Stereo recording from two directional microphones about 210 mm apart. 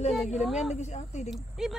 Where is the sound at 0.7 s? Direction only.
35° left (ahead or behind).